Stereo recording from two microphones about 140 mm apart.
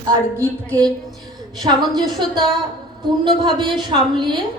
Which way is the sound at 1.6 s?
30° right (ahead or behind).